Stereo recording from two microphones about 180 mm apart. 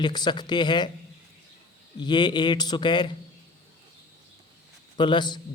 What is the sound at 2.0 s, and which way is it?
A man's voice, 25° left (ahead or behind).